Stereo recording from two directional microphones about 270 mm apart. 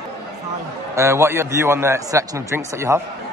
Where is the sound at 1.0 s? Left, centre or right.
Centre.